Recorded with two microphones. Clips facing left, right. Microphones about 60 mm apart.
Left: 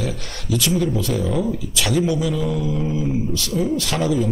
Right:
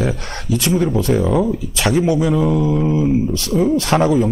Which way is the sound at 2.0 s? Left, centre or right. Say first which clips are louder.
Right 5 dB; right.